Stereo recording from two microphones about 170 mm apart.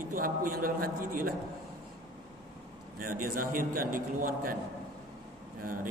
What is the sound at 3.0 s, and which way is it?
A man's voice, 55° right (ahead or behind).